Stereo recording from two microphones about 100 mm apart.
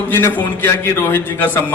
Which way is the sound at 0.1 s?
20° left (ahead or behind).